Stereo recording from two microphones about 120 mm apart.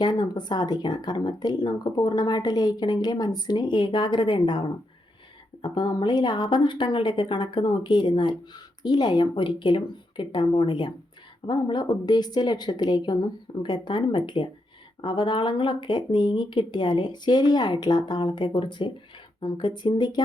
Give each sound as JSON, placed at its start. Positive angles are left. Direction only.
{"t": 0.0, "sound": "a woman's voice", "side_deg": 35}
{"t": 5.6, "sound": "a woman's voice", "side_deg": 35}